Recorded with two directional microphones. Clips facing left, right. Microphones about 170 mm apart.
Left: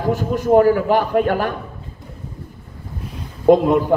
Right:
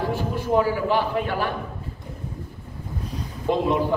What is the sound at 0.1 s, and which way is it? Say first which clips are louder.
A man's voice: left 11 dB; 45° left (ahead or behind).